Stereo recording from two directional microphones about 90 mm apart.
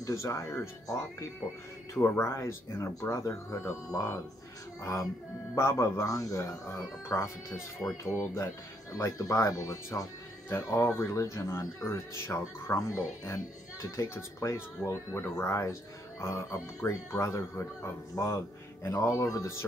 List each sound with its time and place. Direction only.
0.0 s speech: 35° left (ahead or behind)
2.0 s speech: 30° left (ahead or behind)
5.5 s speech: 30° left (ahead or behind)